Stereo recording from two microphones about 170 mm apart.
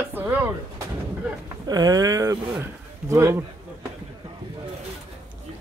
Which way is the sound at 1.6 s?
20° right (ahead or behind).